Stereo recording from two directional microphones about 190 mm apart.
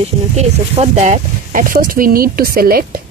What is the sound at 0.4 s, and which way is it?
Speech, 35° right (ahead or behind).